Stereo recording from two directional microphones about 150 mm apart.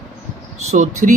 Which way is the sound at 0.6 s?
55° right (ahead or behind).